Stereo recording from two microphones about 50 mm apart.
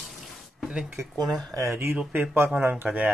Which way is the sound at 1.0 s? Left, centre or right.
Right.